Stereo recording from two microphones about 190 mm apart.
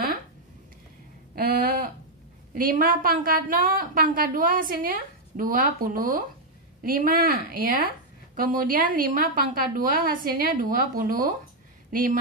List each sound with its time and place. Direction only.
1.3 s a sound: 50° right (ahead or behind)
2.5 s a woman's voice: 45° right (ahead or behind)
11.9 s speech: 45° right (ahead or behind)